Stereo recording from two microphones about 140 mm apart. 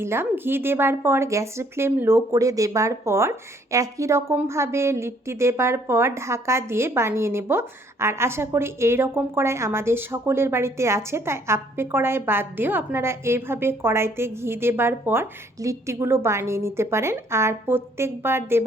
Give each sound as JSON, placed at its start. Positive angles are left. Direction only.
{"t": 0.0, "sound": "a woman's voice", "side_deg": -15}